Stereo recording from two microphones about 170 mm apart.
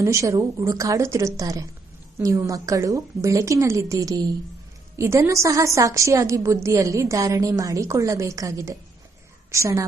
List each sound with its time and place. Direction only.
0.0 s a woman's voice: 15° right (ahead or behind)